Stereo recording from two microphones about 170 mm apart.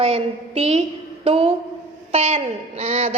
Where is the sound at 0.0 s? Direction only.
35° right (ahead or behind).